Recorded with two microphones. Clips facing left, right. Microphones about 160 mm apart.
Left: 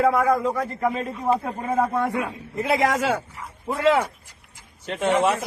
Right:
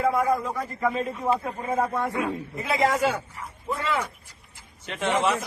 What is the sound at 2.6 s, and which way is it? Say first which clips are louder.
A man's voice: left 2 dB; 70° left (ahead or behind).